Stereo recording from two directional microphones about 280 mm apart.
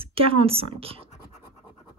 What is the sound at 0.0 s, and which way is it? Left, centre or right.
Speech, centre.